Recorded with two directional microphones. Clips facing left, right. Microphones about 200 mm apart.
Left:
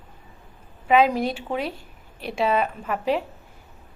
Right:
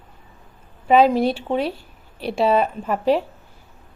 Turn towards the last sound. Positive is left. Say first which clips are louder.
# right 5 dB
turn(degrees=-35)  # may be behind; listen again after turning